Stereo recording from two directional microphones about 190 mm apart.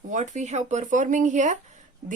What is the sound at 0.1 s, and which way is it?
A woman's voice, 40° right (ahead or behind).